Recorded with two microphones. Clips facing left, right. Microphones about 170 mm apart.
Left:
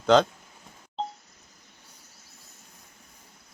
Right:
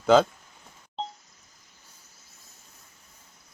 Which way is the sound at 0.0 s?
5° right (ahead or behind).